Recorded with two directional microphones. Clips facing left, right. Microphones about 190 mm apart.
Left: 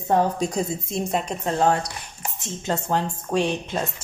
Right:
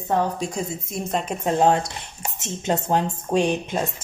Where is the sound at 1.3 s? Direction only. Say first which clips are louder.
Right 4 dB; 15° right (ahead or behind).